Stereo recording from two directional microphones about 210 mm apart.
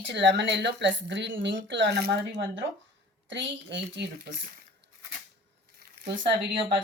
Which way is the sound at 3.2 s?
60° right (ahead or behind).